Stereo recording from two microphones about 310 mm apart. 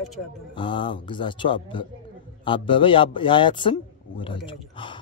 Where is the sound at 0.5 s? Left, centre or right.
Centre.